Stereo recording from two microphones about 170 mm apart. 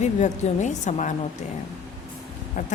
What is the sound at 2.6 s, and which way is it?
Speech, 50° left (ahead or behind).